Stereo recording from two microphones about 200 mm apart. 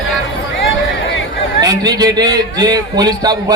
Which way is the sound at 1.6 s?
20° right (ahead or behind).